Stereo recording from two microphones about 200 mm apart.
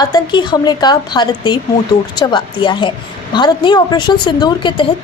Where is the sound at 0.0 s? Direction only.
20° left (ahead or behind).